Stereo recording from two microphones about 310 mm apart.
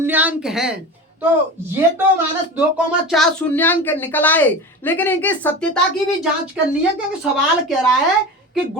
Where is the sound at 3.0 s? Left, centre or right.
Centre.